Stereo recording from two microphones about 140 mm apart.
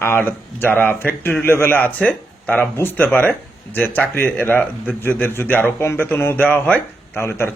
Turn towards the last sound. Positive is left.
turn(degrees=15)  # may be behind; listen again after turning